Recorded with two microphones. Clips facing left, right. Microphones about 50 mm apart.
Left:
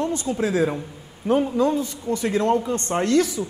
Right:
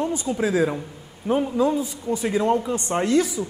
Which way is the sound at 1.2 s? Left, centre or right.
Centre.